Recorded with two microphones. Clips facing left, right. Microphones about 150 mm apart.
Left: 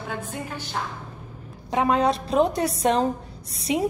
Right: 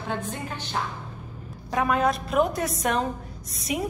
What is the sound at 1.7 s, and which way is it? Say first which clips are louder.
A woman's voice: left 2 dB; 25° left (ahead or behind).